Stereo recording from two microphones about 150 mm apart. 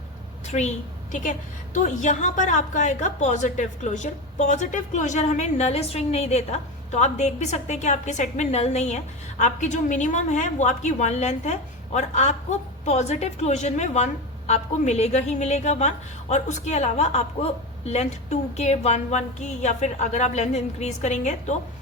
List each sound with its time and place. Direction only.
0.5 s a woman's voice: 40° left (ahead or behind)
1.1 s a woman's voice: 60° left (ahead or behind)